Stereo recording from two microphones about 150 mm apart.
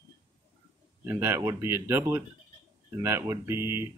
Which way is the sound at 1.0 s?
15° right (ahead or behind).